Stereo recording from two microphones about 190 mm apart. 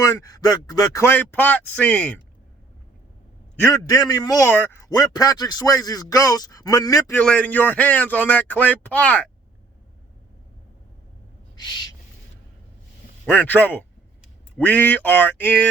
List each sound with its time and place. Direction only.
0.0 s speech: 15° left (ahead or behind)
3.5 s a man's voice: 15° left (ahead or behind)
7.2 s speech: 5° left (ahead or behind)
13.3 s speech: 10° left (ahead or behind)